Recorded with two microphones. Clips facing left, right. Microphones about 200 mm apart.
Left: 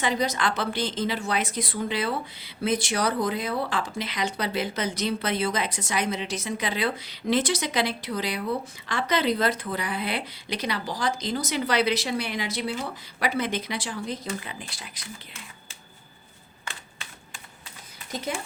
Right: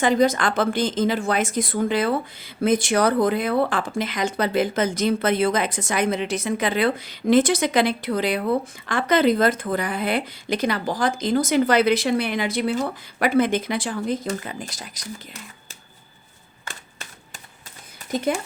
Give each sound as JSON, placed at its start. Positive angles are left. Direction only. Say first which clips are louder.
{"t": 0.0, "sound": "a woman's voice", "louder": "right 7 dB", "side_deg": -50}